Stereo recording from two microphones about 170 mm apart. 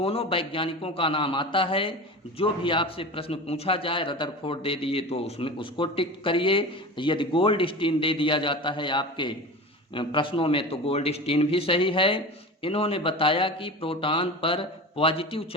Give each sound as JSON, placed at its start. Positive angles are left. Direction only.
{"t": 0.0, "sound": "a man's voice", "side_deg": 35}